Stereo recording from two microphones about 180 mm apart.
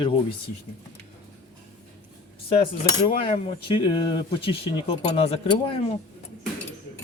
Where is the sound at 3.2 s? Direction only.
30° left (ahead or behind).